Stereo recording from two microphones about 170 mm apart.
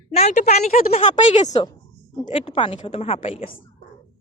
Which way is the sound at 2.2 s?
30° left (ahead or behind).